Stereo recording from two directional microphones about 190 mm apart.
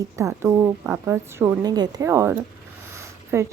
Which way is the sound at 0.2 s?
15° right (ahead or behind).